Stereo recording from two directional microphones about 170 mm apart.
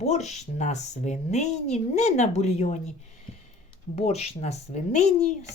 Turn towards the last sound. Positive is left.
turn(degrees=45)  # may be behind; listen again after turning